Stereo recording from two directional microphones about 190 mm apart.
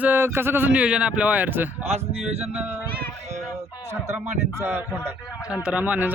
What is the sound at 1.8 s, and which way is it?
Speech, 35° right (ahead or behind).